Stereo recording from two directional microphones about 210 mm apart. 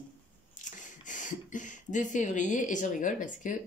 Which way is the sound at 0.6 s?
35° left (ahead or behind).